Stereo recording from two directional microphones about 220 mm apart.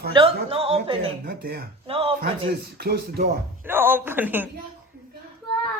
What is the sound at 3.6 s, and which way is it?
Speech, 10° right (ahead or behind).